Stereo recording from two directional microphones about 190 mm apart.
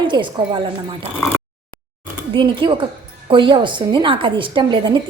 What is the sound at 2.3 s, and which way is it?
A woman's voice, 25° right (ahead or behind).